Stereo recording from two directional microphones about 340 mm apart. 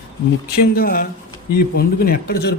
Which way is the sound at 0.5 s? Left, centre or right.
Left.